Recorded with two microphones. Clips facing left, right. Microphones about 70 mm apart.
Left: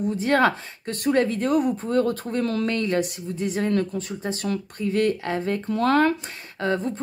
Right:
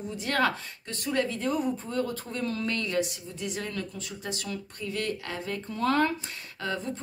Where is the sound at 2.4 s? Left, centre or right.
Left.